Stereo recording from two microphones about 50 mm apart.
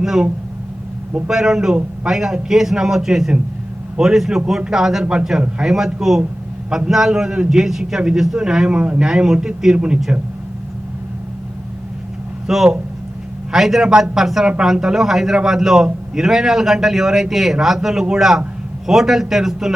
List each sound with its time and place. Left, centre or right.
0.0 s speech: centre
1.3 s a man's voice: centre
12.5 s a man's voice: centre